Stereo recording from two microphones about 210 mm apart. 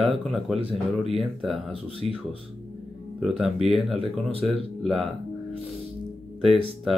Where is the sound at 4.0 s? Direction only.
30° right (ahead or behind).